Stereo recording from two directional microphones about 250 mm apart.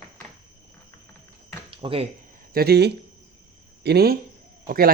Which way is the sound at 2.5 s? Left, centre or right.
Right.